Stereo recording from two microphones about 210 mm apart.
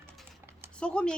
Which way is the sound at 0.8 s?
5° left (ahead or behind).